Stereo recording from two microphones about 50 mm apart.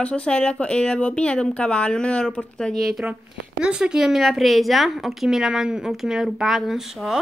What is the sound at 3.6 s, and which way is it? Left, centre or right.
Speech, centre.